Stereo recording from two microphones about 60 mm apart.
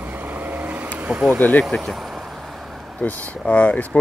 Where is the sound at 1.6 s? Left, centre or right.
Centre.